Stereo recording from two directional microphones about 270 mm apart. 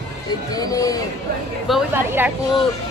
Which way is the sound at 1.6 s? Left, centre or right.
Centre.